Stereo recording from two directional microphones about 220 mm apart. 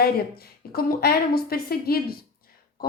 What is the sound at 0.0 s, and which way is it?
A woman's voice, 45° left (ahead or behind).